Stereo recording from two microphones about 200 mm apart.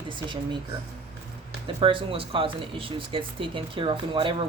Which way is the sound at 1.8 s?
25° right (ahead or behind).